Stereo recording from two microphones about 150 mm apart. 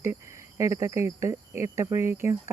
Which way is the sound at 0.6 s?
20° right (ahead or behind).